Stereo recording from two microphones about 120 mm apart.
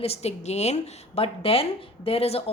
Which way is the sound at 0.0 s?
60° left (ahead or behind).